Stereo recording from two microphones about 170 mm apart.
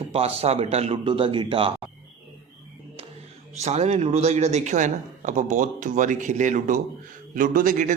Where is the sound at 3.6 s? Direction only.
40° right (ahead or behind).